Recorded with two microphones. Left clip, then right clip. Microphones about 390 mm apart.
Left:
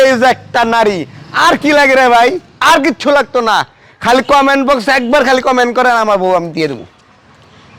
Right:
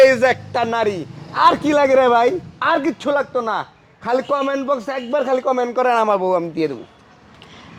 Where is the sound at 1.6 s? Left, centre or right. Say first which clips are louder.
Left 6 dB; left.